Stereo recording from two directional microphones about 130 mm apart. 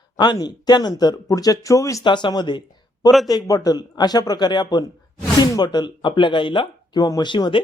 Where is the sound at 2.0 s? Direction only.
35° left (ahead or behind).